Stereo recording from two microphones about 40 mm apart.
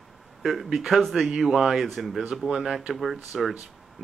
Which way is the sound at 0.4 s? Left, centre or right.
Centre.